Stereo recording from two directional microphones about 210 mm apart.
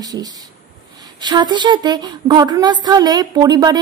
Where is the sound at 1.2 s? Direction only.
20° right (ahead or behind).